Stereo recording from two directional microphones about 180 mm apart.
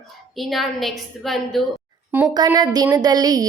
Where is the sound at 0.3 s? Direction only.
Centre (ahead or behind).